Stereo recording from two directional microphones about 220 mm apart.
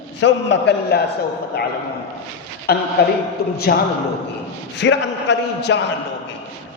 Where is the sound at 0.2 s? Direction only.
55° left (ahead or behind).